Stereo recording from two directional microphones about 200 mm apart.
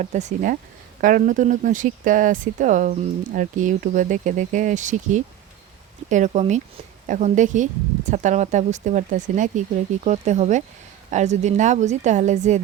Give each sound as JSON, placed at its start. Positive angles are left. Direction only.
{"t": 0.0, "sound": "speech", "side_deg": -35}